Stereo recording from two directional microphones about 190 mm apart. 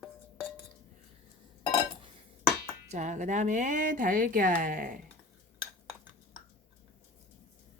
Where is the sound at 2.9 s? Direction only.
40° right (ahead or behind).